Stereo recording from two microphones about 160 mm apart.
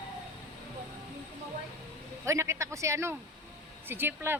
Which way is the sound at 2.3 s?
20° right (ahead or behind).